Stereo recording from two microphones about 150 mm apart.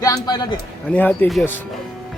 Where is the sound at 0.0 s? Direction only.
25° left (ahead or behind).